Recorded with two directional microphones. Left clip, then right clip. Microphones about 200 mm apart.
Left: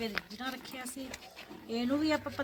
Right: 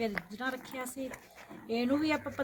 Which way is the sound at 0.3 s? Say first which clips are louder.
Right 3 dB; 35° right (ahead or behind).